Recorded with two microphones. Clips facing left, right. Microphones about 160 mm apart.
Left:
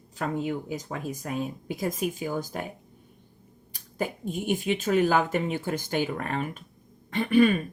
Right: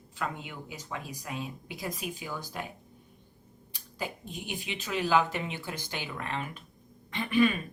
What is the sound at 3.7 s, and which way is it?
A woman's voice, 50° left (ahead or behind).